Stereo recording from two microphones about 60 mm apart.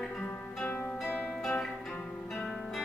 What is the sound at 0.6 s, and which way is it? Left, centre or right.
Music, left.